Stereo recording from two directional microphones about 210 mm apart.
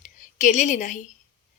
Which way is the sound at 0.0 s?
35° left (ahead or behind).